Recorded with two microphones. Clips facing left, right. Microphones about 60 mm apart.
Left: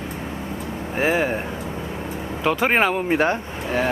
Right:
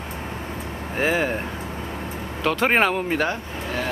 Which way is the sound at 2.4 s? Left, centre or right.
Centre.